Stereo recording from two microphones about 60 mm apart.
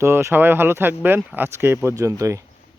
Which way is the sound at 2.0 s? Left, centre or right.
Right.